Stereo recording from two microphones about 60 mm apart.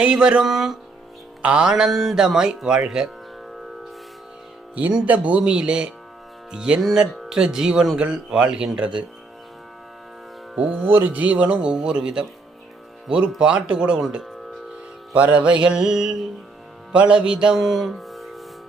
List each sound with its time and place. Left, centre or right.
0.0 s music: centre
0.5 s speech: centre
1.4 s music: centre
1.7 s music: centre
4.7 s speech: centre
6.5 s music: centre
10.8 s speech: right
11.1 s music: right; by 14.3 s centre
15.1 s music: right; by 18.3 s centre